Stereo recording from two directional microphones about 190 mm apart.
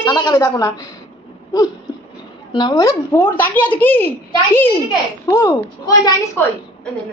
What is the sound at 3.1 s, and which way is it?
A woman's voice, 10° left (ahead or behind).